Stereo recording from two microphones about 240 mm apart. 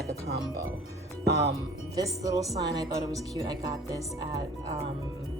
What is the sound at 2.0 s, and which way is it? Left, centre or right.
Speech, centre.